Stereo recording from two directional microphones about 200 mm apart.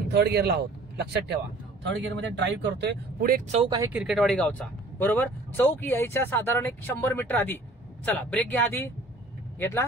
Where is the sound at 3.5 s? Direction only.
20° right (ahead or behind).